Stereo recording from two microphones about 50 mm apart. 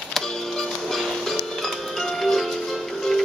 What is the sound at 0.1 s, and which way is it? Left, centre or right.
Music, centre.